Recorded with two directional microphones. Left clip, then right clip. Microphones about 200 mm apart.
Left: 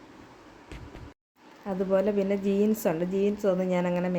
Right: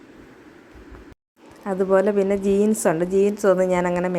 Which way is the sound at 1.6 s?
15° right (ahead or behind).